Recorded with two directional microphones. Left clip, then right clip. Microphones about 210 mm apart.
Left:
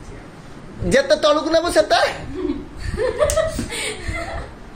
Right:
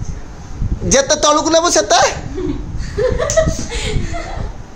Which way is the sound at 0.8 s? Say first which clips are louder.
Right 3 dB; 35° right (ahead or behind).